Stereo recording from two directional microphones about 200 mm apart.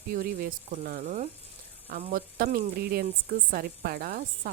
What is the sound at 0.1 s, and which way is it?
Speech, 45° right (ahead or behind).